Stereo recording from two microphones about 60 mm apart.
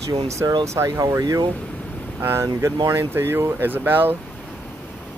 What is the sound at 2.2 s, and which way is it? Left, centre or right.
Speech, right.